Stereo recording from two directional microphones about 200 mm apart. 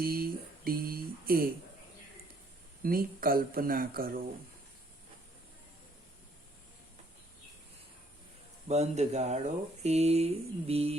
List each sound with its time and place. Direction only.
0.0 s speech: 45° right (ahead or behind)
2.8 s speech: 45° right (ahead or behind)
8.6 s speech: 35° right (ahead or behind)